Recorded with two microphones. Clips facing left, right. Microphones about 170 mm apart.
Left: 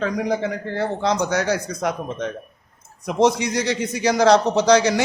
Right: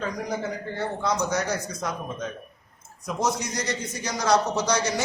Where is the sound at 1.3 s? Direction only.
70° left (ahead or behind).